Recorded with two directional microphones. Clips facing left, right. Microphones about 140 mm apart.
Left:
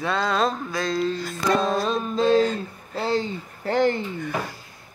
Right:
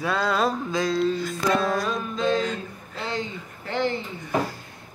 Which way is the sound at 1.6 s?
25° left (ahead or behind).